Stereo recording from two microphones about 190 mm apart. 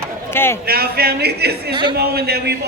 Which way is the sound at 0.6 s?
55° right (ahead or behind).